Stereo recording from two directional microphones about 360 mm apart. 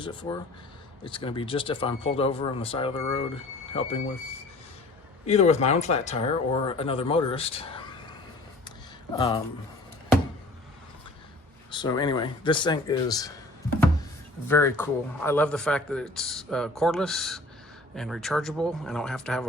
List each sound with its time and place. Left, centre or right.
0.0 s speech: centre
5.2 s speech: centre
9.1 s speech: centre
11.7 s speech: centre
14.4 s speech: centre